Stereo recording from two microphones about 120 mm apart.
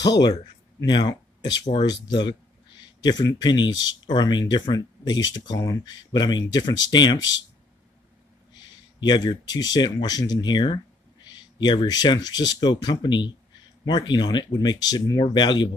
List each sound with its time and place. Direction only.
0.0 s speech: 35° left (ahead or behind)
9.0 s speech: 35° left (ahead or behind)